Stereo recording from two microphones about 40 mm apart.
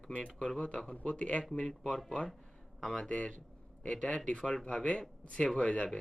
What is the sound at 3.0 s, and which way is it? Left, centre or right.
A man's voice, left.